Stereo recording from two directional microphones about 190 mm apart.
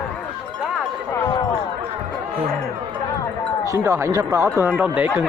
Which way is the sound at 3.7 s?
15° right (ahead or behind).